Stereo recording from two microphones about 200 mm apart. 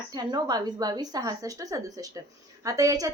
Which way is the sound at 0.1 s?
20° right (ahead or behind).